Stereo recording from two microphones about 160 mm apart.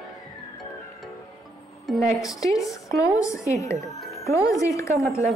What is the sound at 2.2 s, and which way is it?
Speech, 20° left (ahead or behind).